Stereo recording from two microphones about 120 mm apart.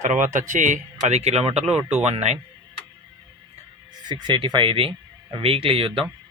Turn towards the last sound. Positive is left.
turn(degrees=-50)  # may be behind; listen again after turning